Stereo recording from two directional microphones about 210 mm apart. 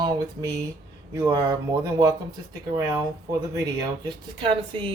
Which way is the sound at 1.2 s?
15° right (ahead or behind).